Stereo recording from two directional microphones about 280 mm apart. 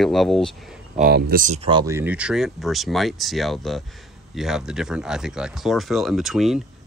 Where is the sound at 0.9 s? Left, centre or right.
Right.